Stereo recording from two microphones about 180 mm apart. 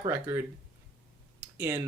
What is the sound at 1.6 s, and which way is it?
Speech, 15° right (ahead or behind).